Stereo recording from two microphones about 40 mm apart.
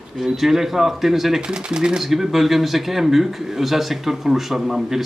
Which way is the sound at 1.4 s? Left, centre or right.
Right.